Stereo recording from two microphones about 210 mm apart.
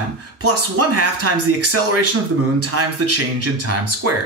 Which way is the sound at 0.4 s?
90° right.